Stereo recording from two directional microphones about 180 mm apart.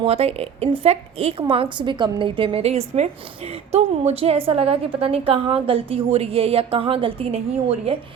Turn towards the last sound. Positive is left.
turn(degrees=-35)  # may be behind; listen again after turning